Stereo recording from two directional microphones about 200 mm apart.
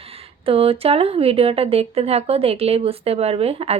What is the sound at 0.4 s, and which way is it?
Speech, 30° right (ahead or behind).